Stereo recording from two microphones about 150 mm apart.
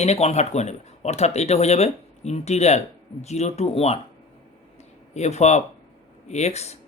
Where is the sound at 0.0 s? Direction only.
45° left (ahead or behind).